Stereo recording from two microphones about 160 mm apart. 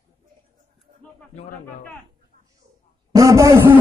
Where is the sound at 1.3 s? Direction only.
45° left (ahead or behind).